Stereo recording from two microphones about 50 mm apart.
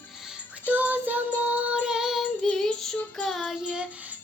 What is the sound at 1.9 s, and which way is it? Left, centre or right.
Child singing, centre.